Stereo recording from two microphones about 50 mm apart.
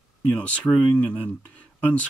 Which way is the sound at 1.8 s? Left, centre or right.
Left.